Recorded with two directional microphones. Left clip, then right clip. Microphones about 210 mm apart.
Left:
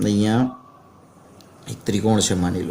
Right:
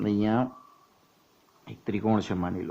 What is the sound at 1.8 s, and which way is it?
Speech, 25° right (ahead or behind).